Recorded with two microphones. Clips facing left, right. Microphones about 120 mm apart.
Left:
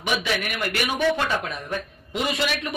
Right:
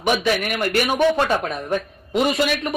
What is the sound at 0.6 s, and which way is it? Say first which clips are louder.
A man's voice: right 6 dB; 45° right (ahead or behind).